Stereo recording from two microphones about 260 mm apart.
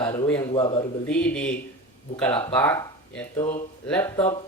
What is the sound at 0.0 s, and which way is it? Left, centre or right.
Speech, centre.